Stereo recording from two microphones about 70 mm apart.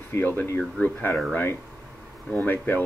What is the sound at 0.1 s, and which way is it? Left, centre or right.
Speech, left.